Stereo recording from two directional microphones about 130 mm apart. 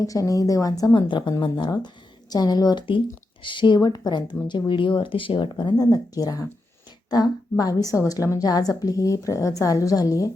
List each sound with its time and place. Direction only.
0.0 s a woman's voice: 25° left (ahead or behind)
0.9 s a woman's voice: 35° left (ahead or behind)